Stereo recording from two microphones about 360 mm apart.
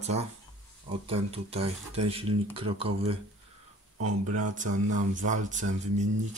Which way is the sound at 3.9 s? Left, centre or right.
Right.